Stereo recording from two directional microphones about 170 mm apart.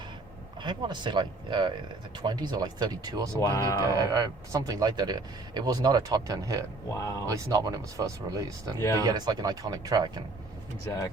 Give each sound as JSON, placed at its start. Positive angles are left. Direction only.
{"t": 0.6, "sound": "speech", "side_deg": -25}
{"t": 3.4, "sound": "speech", "side_deg": 20}
{"t": 3.8, "sound": "speech", "side_deg": -20}
{"t": 6.9, "sound": "speech", "side_deg": 15}
{"t": 7.3, "sound": "speech", "side_deg": -20}
{"t": 8.8, "sound": "speech", "side_deg": 20}
{"t": 9.0, "sound": "speech", "side_deg": -20}